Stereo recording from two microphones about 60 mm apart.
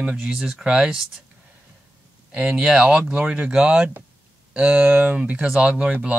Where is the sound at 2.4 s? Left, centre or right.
Centre.